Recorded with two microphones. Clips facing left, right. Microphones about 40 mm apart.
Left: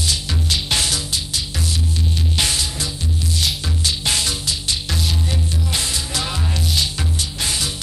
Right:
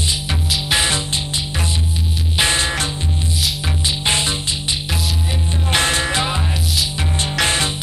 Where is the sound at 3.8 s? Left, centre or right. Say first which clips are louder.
Right 2 dB; right.